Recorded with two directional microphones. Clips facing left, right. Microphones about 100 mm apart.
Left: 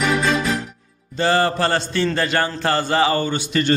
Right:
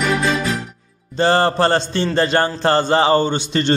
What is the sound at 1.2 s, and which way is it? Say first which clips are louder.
A man's voice: right 3 dB; 35° right (ahead or behind).